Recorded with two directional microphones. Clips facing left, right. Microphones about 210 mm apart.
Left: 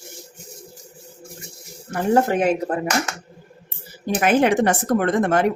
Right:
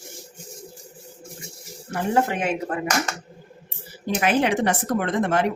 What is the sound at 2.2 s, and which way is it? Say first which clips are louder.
Speech: left 5 dB; 40° left (ahead or behind).